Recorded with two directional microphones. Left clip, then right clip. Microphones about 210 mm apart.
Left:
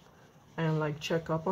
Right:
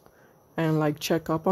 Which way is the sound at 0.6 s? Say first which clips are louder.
Right 7 dB; 55° right (ahead or behind).